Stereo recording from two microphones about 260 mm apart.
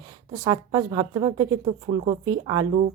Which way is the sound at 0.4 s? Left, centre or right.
Centre.